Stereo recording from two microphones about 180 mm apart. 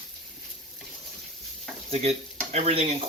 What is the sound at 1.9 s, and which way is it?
Stir, 35° right (ahead or behind).